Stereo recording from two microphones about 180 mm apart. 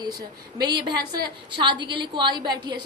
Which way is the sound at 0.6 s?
25° right (ahead or behind).